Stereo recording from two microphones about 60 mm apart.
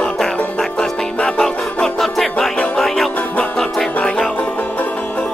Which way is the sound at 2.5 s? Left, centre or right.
Centre.